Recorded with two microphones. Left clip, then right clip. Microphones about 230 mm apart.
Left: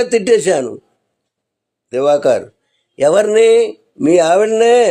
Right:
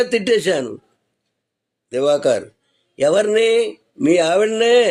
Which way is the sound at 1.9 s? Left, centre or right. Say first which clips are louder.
Left 4 dB; centre.